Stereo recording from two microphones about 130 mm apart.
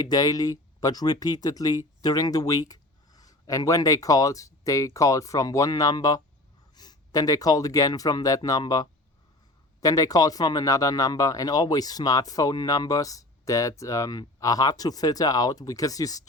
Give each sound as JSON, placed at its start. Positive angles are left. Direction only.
{"t": 0.0, "sound": "speech", "side_deg": 30}